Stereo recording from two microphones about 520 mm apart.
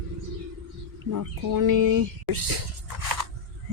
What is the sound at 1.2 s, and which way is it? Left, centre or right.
Speech, right.